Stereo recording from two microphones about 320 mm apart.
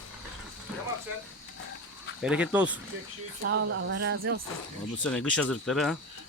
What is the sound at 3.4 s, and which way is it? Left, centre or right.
Speech, right.